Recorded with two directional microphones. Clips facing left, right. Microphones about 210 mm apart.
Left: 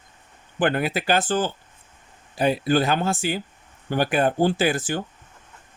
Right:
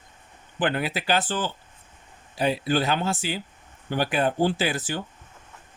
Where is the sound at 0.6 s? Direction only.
50° left (ahead or behind).